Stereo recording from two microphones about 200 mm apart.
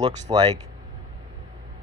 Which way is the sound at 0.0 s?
20° right (ahead or behind).